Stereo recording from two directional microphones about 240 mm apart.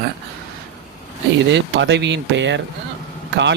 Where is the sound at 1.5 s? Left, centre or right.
Right.